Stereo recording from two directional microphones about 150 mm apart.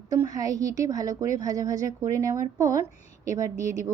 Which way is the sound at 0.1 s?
25° right (ahead or behind).